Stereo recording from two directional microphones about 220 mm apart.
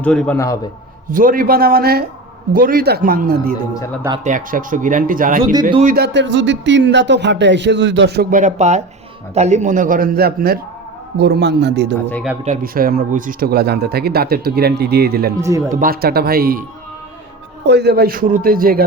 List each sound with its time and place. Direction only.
0.0 s a man's voice: 5° left (ahead or behind)
1.1 s a man's voice: 40° right (ahead or behind)
12.5 s speech: 40° right (ahead or behind)
15.4 s speech: 15° right (ahead or behind)
15.7 s speech: 40° right (ahead or behind)
17.7 s speech: 45° right (ahead or behind)